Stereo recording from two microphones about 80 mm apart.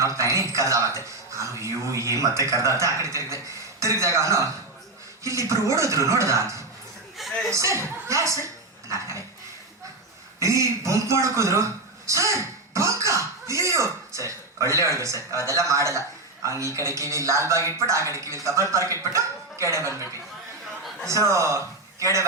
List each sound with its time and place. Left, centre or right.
0.0 s speech: right
7.2 s chuckle: centre
7.5 s speech: right
10.4 s a man's voice: right
17.6 s speech: left
17.8 s a man's voice: right
21.1 s a man's voice: right